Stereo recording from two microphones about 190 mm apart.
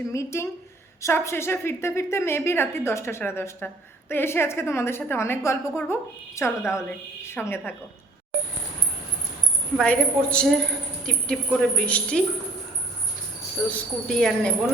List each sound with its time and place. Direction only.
0.1 s a woman's voice: 15° left (ahead or behind)
9.7 s a woman's voice: 5° left (ahead or behind)
13.7 s a woman's voice: 5° left (ahead or behind)